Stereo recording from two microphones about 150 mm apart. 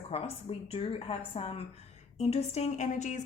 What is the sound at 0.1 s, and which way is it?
A woman's voice, 40° left (ahead or behind).